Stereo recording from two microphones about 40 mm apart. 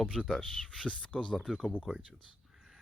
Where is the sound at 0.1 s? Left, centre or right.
Centre.